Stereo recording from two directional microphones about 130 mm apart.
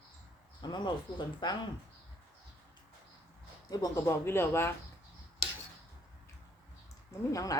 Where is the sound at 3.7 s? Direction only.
30° left (ahead or behind).